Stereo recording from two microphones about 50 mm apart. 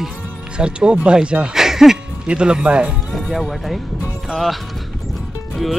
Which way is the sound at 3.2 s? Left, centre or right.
Centre.